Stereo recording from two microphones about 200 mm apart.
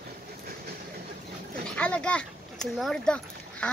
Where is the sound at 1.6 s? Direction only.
5° left (ahead or behind).